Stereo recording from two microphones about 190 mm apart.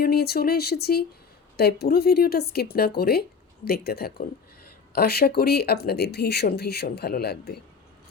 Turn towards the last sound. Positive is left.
turn(degrees=55)  # may be behind; listen again after turning